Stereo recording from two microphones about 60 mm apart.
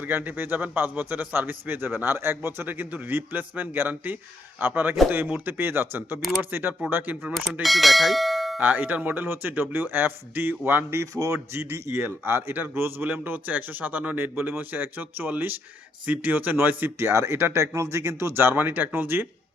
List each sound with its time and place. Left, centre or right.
0.0 s a man's voice: right
2.6 s a man's voice: right
7.6 s speech: centre
8.5 s a man's voice: right
11.0 s speech: right
11.5 s a man's voice: right